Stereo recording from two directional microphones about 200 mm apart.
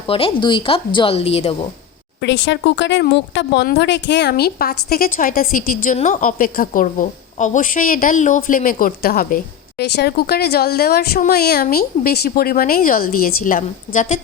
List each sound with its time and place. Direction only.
0.1 s a woman's voice: 25° left (ahead or behind)
2.2 s speech: 65° left (ahead or behind); by 14.2 s 40° left (ahead or behind)